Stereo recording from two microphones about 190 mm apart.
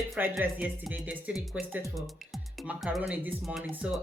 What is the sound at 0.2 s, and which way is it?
Speech, 10° right (ahead or behind).